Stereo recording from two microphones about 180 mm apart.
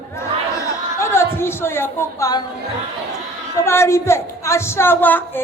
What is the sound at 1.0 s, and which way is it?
A man's voice, 15° left (ahead or behind).